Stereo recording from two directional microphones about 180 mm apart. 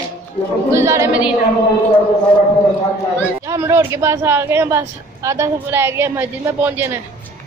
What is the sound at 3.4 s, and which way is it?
Speech, 15° right (ahead or behind).